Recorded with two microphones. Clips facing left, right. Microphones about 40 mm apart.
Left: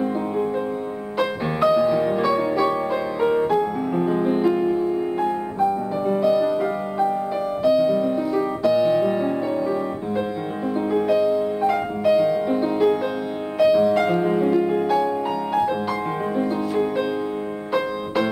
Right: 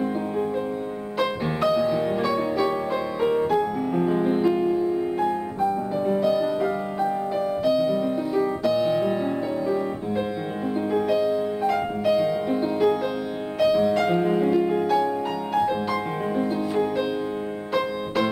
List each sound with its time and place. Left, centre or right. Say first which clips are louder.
1.8 s music: left 3 dB; centre
16.3 s music: left 1 dB; centre